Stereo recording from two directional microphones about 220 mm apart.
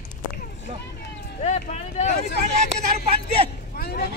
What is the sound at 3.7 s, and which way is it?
Speech, 45° left (ahead or behind).